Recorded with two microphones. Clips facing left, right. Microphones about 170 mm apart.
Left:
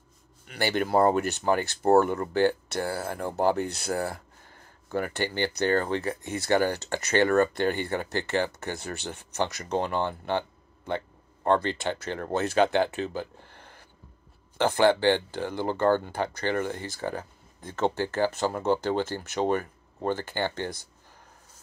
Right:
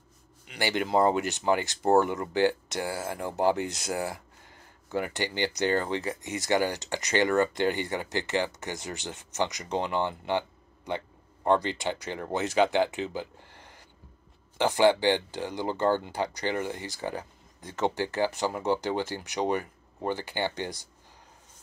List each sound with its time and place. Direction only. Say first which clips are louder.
0.6 s speech: left 2 dB; 15° right (ahead or behind)
11.4 s speech: left 1 dB; 15° right (ahead or behind)
12.7 s a sound: left 1 dB; 15° right (ahead or behind)
14.6 s speech: left 1 dB; 15° right (ahead or behind)